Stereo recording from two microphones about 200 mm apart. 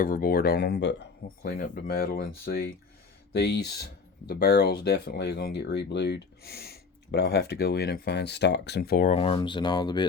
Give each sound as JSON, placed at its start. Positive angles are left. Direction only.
{"t": 0.0, "sound": "speech", "side_deg": 45}
{"t": 9.1, "sound": "speech", "side_deg": 25}